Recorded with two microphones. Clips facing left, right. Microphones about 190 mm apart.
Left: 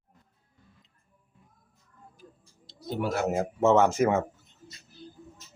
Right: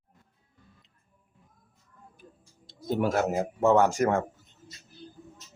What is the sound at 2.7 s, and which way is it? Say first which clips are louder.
Speech: right 3 dB; 50° right (ahead or behind).